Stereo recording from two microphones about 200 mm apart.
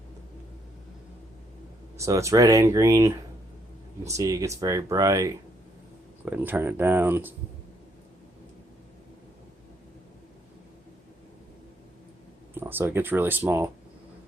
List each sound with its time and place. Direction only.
2.0 s speech: 15° right (ahead or behind)
12.5 s speech: 10° right (ahead or behind)